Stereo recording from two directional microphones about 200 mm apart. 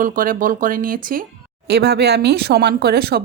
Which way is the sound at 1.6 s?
55° right (ahead or behind).